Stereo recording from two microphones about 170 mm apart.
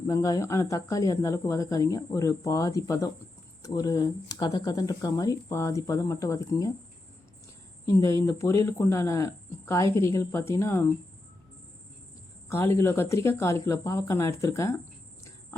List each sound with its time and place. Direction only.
0.1 s speech: 20° left (ahead or behind)
7.9 s speech: 15° left (ahead or behind)
12.5 s speech: 15° left (ahead or behind)